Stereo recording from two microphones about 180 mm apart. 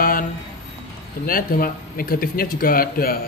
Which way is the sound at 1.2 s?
55° left (ahead or behind).